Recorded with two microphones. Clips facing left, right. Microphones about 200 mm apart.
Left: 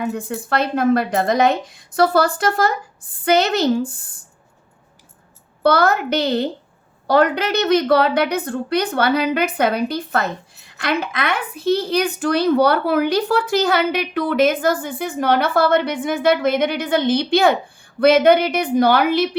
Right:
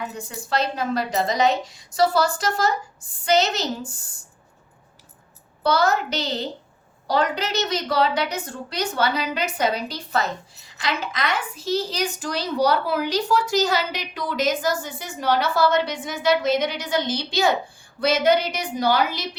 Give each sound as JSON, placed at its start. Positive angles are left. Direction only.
{"t": 0.0, "sound": "a woman's voice", "side_deg": 55}
{"t": 5.6, "sound": "a woman's voice", "side_deg": 55}